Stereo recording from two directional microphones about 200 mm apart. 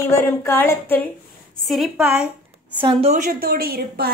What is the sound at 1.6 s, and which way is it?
Speech, centre (ahead or behind).